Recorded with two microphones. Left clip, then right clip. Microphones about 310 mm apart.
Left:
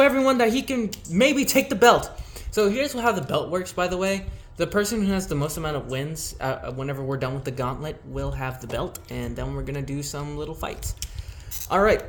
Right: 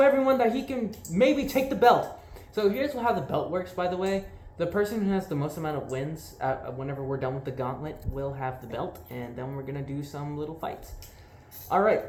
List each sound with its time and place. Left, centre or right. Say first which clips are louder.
0.0 s speech: left 3 dB; left